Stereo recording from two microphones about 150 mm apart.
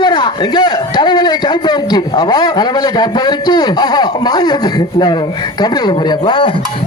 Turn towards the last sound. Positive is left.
turn(degrees=35)  # may be behind; listen again after turning